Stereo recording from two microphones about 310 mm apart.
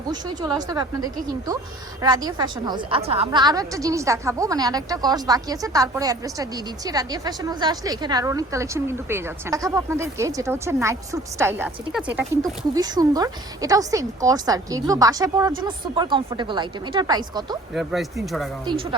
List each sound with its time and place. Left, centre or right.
0.1 s a woman's voice: centre
2.0 s a woman's voice: centre
17.7 s speech: centre
18.6 s a woman's voice: centre